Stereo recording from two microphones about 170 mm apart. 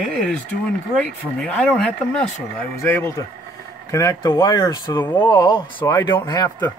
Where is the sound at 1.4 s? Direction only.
10° left (ahead or behind).